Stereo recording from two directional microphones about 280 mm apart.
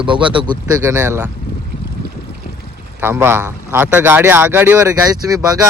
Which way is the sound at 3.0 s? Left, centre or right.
Centre.